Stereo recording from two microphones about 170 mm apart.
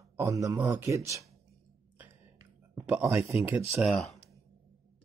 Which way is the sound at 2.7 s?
15° right (ahead or behind).